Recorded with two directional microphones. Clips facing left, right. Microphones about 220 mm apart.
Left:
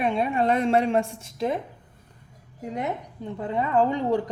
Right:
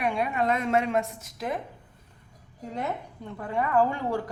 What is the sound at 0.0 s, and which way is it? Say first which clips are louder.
A woman's voice: left 3 dB; 25° left (ahead or behind).